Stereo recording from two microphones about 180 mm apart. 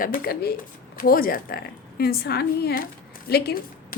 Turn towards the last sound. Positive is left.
turn(degrees=60)  # may be behind; listen again after turning